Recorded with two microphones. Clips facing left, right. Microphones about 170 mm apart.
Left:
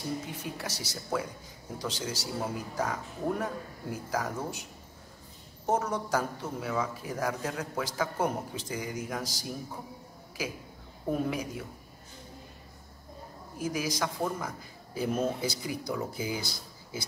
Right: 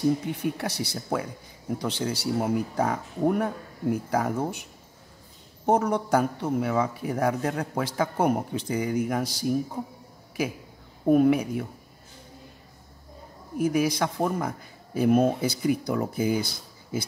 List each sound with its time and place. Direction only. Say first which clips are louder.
0.3 s speech: right 9 dB; 60° right (ahead or behind)
5.7 s speech: right 6 dB; 60° right (ahead or behind)
11.1 s speech: right 11 dB; 65° right (ahead or behind)
13.6 s speech: right 8 dB; 60° right (ahead or behind)